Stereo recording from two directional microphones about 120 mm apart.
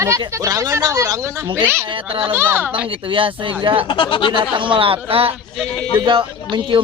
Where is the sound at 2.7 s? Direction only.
45° right (ahead or behind).